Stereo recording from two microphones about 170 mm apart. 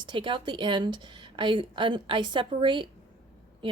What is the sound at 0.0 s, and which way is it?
Speech, 30° right (ahead or behind).